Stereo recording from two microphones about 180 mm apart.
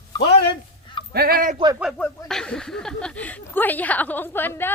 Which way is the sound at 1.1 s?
55° right (ahead or behind).